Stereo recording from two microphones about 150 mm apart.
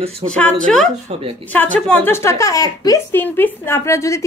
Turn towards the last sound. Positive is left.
turn(degrees=20)  # may be behind; listen again after turning